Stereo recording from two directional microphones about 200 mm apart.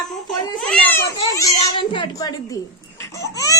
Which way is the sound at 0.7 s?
10° left (ahead or behind).